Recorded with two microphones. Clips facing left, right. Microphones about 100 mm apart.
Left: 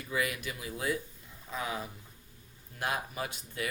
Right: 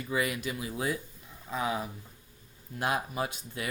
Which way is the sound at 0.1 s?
25° right (ahead or behind).